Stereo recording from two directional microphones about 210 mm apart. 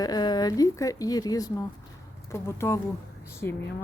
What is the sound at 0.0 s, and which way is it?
Speech, 20° left (ahead or behind).